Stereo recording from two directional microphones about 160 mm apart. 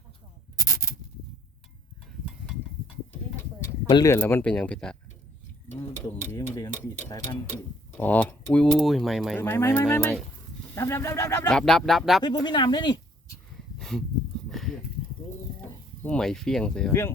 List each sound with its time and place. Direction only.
4.0 s speech: 20° left (ahead or behind)
6.3 s tick-tock: 20° left (ahead or behind)
7.1 s speech: 15° left (ahead or behind)
9.3 s speech: 15° left (ahead or behind)
11.4 s speech: 5° left (ahead or behind)
12.2 s speech: 25° left (ahead or behind)
13.7 s a sound: 5° left (ahead or behind)
16.0 s speech: 5° left (ahead or behind)